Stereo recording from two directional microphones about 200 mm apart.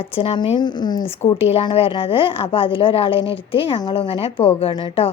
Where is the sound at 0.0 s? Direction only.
25° left (ahead or behind).